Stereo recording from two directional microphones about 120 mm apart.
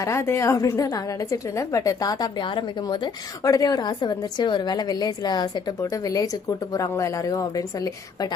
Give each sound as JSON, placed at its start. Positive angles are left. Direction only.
{"t": 0.0, "sound": "a woman's voice", "side_deg": 20}